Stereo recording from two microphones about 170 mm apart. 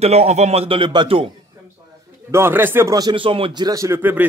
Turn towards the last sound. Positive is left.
turn(degrees=-10)  # may be behind; listen again after turning